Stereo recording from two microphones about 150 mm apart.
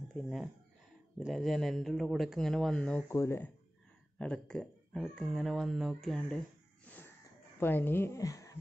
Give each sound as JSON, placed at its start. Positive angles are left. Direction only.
{"t": 0.1, "sound": "a woman's voice", "side_deg": 0}
{"t": 4.2, "sound": "speech", "side_deg": 5}
{"t": 7.6, "sound": "a woman's voice", "side_deg": 15}